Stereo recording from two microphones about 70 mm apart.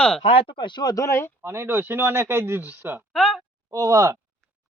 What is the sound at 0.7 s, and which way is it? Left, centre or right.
Speech, left.